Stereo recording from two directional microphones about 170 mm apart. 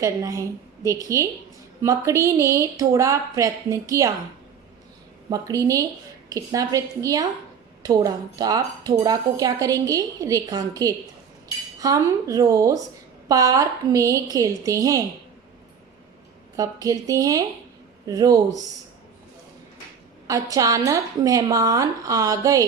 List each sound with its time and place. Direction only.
0.0 s a woman's voice: 20° right (ahead or behind)
5.3 s speech: 20° right (ahead or behind)
16.6 s speech: 20° right (ahead or behind)
20.2 s speech: 20° right (ahead or behind)